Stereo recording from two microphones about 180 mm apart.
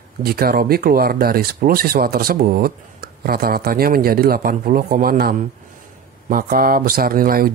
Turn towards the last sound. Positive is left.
turn(degrees=-55)  # may be behind; listen again after turning